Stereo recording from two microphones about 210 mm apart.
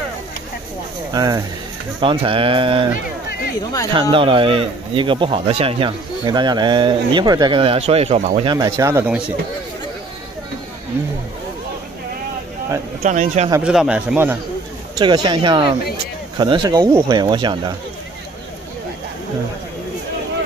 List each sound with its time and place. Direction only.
1.1 s speech: 20° right (ahead or behind)
2.9 s run: 50° left (ahead or behind)
3.9 s speech: 25° right (ahead or behind)
8.5 s speech: 15° right (ahead or behind)
13.0 s a man's voice: 35° right (ahead or behind)
13.6 s speech: 5° right (ahead or behind)
15.0 s speech: 20° right (ahead or behind)